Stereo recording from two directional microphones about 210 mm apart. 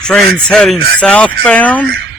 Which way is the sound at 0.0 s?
5° left (ahead or behind).